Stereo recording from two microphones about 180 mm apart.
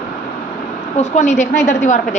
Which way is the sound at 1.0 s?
40° left (ahead or behind).